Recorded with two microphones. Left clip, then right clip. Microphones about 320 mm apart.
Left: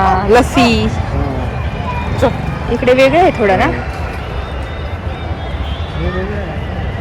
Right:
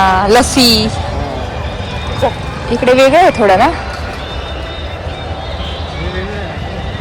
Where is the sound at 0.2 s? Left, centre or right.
Centre.